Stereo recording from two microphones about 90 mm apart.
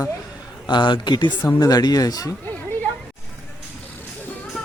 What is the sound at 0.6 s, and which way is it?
Speech, 60° left (ahead or behind).